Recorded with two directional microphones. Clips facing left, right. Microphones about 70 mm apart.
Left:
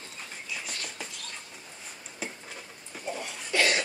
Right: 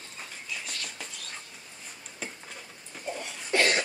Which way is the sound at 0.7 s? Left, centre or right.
Centre.